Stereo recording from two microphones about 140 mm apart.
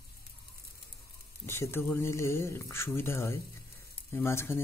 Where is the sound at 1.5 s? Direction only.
15° left (ahead or behind).